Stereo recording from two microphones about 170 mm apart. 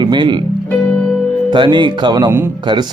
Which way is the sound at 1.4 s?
30° right (ahead or behind).